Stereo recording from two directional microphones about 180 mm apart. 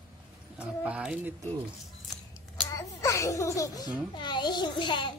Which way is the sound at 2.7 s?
20° left (ahead or behind).